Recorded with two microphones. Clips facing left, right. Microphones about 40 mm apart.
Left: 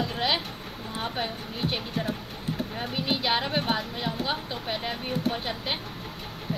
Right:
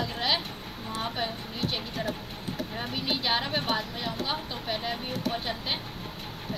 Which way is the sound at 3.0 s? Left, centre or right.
Centre.